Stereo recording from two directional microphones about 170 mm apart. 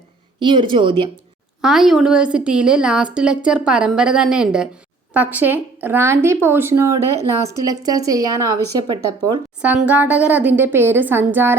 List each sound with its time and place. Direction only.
0.3 s speech: 30° right (ahead or behind)
1.6 s a woman's voice: centre (ahead or behind); by 8.5 s 20° right (ahead or behind)
9.6 s speech: 10° right (ahead or behind)